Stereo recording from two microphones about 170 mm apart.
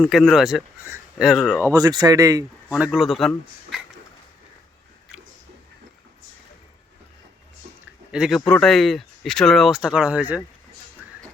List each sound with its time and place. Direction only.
0.0 s speech: centre (ahead or behind)
1.7 s speech: 20° right (ahead or behind)
2.7 s speech: 5° right (ahead or behind)
8.1 s speech: 5° right (ahead or behind)